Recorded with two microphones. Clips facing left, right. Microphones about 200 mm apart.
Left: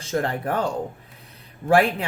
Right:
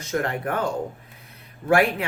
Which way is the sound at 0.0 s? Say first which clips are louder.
Left 1 dB; 30° left (ahead or behind).